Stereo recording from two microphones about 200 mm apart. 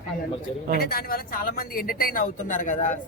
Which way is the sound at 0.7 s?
50° left (ahead or behind).